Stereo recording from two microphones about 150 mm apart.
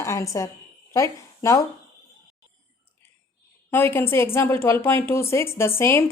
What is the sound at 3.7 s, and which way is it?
A woman's voice, 15° left (ahead or behind).